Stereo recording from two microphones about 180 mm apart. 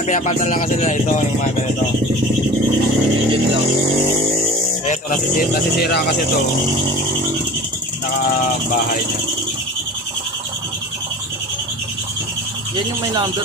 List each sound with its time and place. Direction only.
0.1 s speech: 45° left (ahead or behind)
4.9 s speech: 50° left (ahead or behind)